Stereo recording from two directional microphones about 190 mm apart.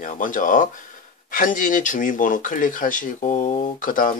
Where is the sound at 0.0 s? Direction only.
45° left (ahead or behind).